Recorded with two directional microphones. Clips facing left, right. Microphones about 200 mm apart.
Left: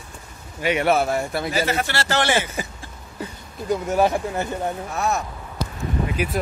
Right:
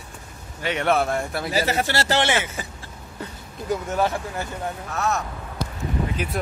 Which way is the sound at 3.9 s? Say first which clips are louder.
Left 6 dB; 15° left (ahead or behind).